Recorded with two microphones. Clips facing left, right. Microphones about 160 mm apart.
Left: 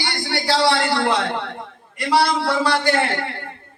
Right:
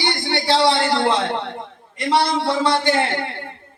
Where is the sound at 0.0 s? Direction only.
25° right (ahead or behind).